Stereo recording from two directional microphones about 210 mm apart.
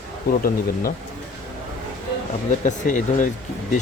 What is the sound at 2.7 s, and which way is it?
Speech, 35° left (ahead or behind).